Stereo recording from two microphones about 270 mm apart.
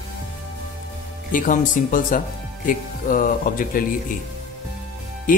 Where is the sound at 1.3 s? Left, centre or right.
Left.